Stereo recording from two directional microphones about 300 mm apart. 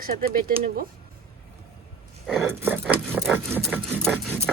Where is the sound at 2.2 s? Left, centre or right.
Centre.